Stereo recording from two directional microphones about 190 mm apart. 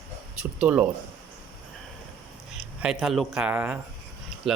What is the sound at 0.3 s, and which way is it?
Speech, 5° right (ahead or behind).